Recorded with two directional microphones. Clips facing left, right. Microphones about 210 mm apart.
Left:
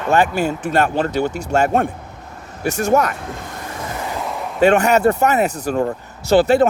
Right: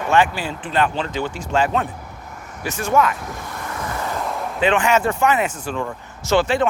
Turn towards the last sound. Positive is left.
turn(degrees=35)  # may be behind; listen again after turning